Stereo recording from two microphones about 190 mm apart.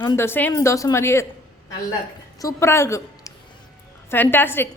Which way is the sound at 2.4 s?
15° left (ahead or behind).